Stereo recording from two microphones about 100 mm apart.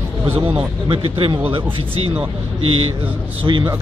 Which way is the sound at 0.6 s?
55° right (ahead or behind).